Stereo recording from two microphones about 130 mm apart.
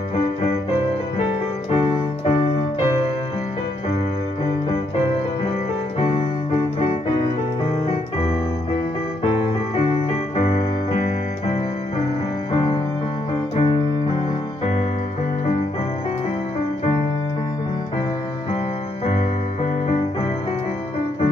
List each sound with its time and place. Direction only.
1.7 s keyboard: 40° left (ahead or behind)
5.9 s keyboard: 50° left (ahead or behind)
10.3 s music: 50° left (ahead or behind)
12.5 s music: 40° left (ahead or behind)
13.6 s keyboard: 45° left (ahead or behind)